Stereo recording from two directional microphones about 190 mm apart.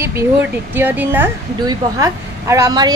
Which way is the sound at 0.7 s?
10° right (ahead or behind).